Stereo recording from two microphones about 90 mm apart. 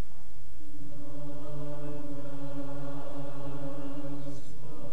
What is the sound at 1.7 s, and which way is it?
Chant, 5° left (ahead or behind).